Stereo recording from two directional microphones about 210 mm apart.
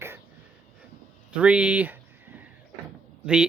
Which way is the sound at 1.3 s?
5° right (ahead or behind).